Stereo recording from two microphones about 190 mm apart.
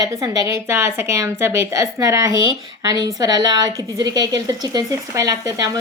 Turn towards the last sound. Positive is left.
turn(degrees=-20)  # may be behind; listen again after turning